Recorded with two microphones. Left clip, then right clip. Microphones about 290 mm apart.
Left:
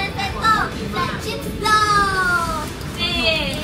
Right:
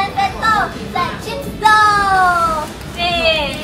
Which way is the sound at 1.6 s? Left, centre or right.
Centre.